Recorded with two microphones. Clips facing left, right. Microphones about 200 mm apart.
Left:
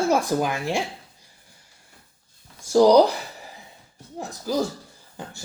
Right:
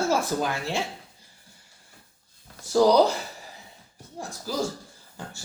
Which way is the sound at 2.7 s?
15° left (ahead or behind).